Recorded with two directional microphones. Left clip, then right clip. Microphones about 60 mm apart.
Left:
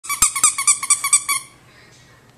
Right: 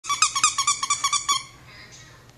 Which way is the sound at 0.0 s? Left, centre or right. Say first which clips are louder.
Left 1 dB; centre.